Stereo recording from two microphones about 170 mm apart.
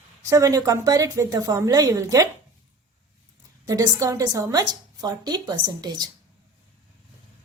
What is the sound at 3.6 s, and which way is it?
A woman's voice, 20° right (ahead or behind).